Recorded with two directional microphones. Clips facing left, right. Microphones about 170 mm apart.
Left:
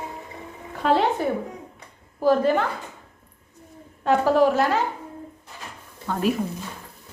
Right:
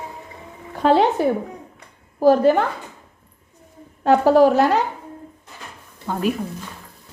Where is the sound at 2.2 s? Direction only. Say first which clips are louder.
Right 5 dB; 40° right (ahead or behind).